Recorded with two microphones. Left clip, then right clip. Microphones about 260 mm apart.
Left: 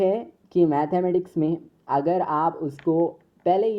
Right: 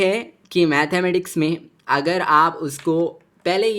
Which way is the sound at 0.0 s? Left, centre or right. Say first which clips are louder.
Right 3 dB; right.